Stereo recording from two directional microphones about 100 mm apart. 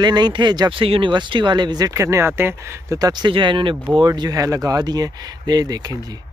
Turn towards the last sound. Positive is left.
turn(degrees=-40)  # may be behind; listen again after turning